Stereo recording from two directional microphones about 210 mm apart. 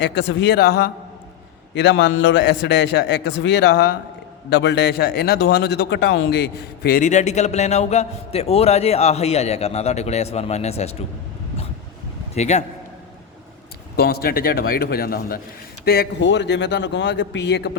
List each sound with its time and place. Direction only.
0.0 s a man's voice: 55° left (ahead or behind); by 11.0 s 30° left (ahead or behind)
12.3 s a man's voice: 35° left (ahead or behind)
13.9 s a man's voice: 50° left (ahead or behind)